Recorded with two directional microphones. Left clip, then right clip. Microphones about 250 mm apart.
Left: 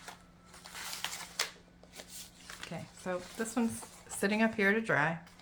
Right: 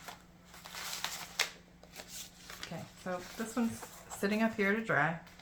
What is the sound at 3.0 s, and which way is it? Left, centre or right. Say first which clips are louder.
Speech: left 3 dB; left.